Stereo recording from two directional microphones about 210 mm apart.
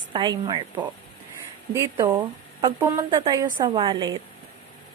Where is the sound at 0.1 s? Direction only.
20° right (ahead or behind).